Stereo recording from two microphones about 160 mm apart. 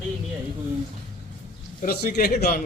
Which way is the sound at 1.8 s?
80° left.